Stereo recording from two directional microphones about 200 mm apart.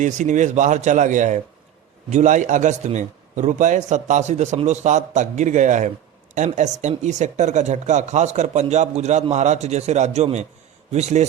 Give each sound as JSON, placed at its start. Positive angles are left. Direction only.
{"t": 0.0, "sound": "speech", "side_deg": -40}